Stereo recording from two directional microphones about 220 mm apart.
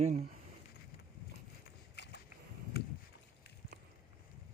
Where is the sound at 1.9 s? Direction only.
50° left (ahead or behind).